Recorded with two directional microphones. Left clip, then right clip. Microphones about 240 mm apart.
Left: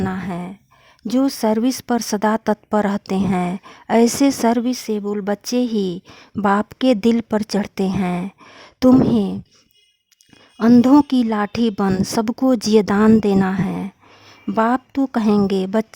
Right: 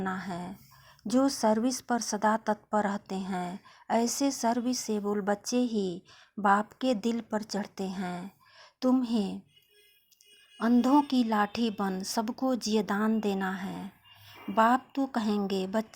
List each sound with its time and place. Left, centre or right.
0.0 s a sound: left
1.0 s speech: left
10.6 s a woman's voice: left